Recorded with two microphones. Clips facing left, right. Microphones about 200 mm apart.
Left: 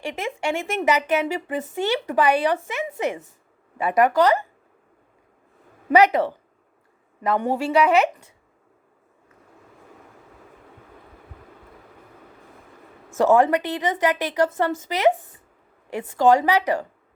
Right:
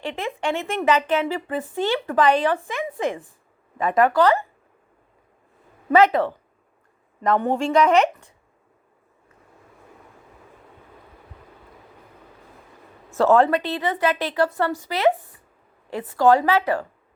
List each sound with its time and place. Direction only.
0.0 s speech: 10° left (ahead or behind)
3.8 s speech: 10° left (ahead or behind)
5.9 s speech: 15° left (ahead or behind)
13.1 s speech: 15° left (ahead or behind)